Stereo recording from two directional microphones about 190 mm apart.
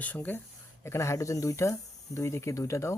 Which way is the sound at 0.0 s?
10° left (ahead or behind).